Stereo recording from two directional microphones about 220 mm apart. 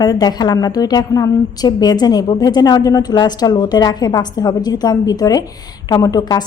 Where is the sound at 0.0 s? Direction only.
20° left (ahead or behind).